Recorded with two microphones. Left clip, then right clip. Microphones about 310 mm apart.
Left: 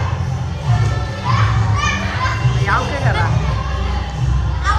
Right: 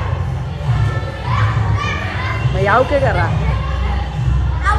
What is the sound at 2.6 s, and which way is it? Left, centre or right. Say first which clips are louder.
Speech: right 6 dB; centre.